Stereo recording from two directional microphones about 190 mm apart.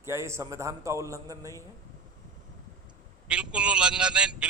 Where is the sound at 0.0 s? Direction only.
15° right (ahead or behind).